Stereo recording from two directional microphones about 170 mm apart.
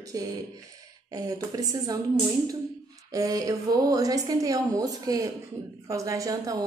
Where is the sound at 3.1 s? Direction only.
20° right (ahead or behind).